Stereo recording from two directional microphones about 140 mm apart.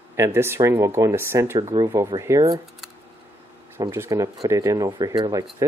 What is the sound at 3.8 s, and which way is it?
Speech, 20° right (ahead or behind).